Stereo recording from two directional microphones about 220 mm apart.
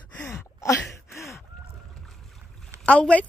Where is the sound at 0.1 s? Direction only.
5° left (ahead or behind).